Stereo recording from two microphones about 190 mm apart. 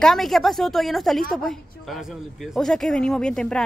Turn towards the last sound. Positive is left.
turn(degrees=5)  # may be behind; listen again after turning